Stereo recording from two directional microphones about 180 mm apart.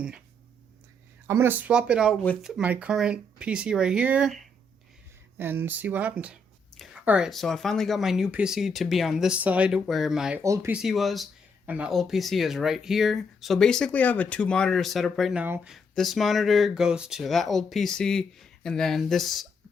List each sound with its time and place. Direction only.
1.3 s speech: 10° right (ahead or behind)
10.4 s speech: 15° right (ahead or behind)
10.8 s speech: centre (ahead or behind)